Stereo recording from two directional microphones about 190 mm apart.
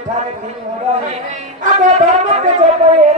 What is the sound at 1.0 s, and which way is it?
Speech, 40° right (ahead or behind).